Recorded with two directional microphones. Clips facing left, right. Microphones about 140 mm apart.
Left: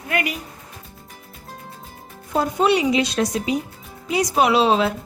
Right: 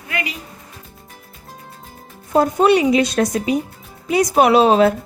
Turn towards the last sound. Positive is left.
turn(degrees=-50)  # may be behind; listen again after turning